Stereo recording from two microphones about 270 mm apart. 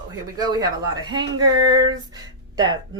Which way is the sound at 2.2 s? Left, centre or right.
Centre.